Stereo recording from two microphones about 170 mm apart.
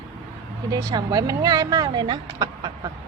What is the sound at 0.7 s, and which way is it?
Speech, 20° right (ahead or behind).